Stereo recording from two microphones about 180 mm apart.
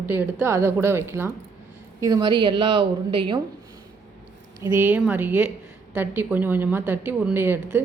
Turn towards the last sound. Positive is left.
turn(degrees=-10)  # may be behind; listen again after turning